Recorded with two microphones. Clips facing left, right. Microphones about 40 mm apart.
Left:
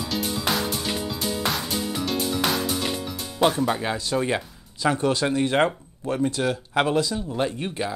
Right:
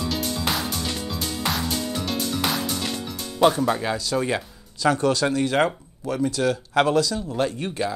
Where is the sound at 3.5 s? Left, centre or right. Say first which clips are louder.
Right 1 dB; centre.